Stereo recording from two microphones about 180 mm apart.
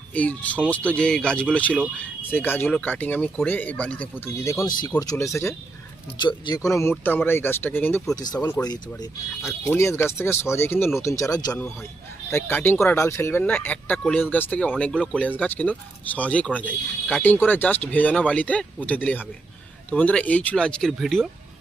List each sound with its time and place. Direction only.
0.1 s speech: 10° left (ahead or behind)